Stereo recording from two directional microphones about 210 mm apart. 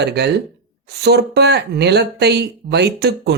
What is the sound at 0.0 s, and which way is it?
Speech, 50° right (ahead or behind).